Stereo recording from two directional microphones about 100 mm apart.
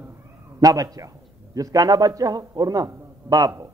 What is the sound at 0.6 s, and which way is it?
Speech, 40° right (ahead or behind).